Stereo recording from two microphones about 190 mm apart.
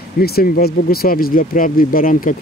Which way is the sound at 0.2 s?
55° left (ahead or behind).